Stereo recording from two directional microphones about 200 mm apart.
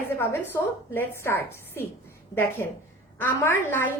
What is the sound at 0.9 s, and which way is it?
A woman's voice, 10° left (ahead or behind).